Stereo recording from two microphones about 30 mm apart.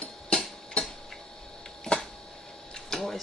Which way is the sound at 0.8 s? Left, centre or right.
Left.